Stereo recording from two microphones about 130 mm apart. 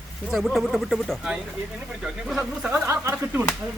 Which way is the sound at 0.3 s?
Centre (ahead or behind).